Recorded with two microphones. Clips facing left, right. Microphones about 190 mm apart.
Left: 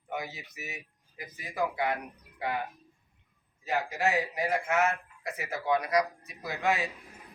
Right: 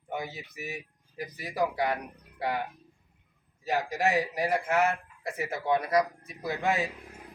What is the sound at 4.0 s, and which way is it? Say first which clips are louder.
Speech: right 2 dB; 35° right (ahead or behind).